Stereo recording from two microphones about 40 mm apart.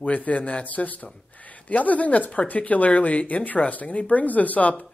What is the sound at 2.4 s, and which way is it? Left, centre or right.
Speech, left.